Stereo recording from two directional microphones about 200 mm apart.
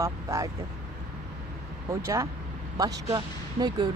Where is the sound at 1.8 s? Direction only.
15° right (ahead or behind).